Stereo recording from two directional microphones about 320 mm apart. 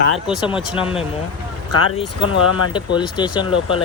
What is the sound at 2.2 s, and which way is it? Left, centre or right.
Speech, left.